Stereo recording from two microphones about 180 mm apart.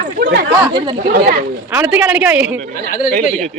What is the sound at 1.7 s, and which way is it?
Speech, 10° right (ahead or behind).